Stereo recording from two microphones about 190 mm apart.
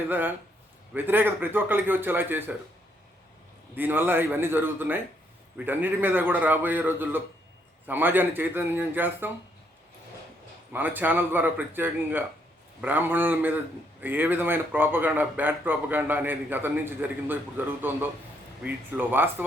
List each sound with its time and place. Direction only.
0.1 s speech: 10° right (ahead or behind)
3.8 s speech: 10° right (ahead or behind)
10.7 s speech: 10° right (ahead or behind)